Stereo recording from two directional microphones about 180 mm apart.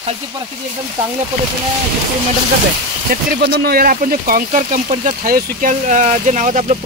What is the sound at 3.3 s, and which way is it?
Speech, 60° right (ahead or behind).